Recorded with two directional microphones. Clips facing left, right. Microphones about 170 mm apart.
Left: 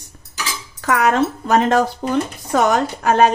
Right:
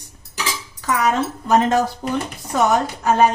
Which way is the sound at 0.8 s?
55° left (ahead or behind).